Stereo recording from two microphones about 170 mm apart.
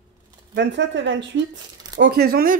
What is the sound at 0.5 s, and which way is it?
Speech, 90° right.